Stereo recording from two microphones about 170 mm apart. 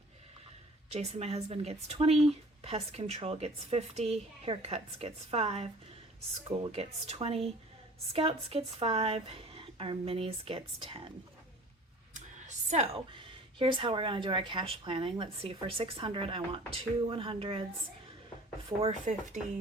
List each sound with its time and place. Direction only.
0.9 s speech: 35° right (ahead or behind)
12.1 s speech: 45° right (ahead or behind)
18.8 s speech: 45° right (ahead or behind)